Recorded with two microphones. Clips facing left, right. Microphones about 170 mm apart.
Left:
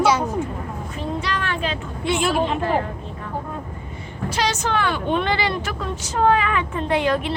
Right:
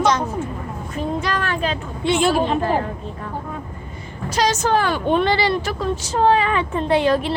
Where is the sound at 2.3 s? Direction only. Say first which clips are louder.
Right 2 dB; 35° right (ahead or behind).